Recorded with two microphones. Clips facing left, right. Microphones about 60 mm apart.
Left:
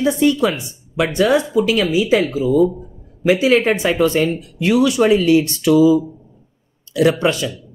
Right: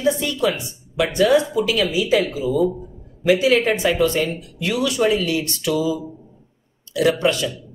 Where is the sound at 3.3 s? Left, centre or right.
Left.